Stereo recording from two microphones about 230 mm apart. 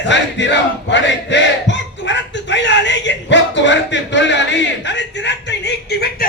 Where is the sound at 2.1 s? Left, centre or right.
Left.